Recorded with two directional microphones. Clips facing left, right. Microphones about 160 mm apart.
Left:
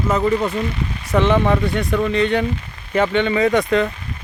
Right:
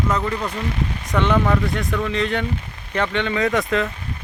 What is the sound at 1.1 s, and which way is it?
Speech, 20° left (ahead or behind).